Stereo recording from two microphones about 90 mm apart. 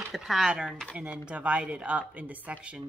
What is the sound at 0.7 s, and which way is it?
Speech, 5° left (ahead or behind).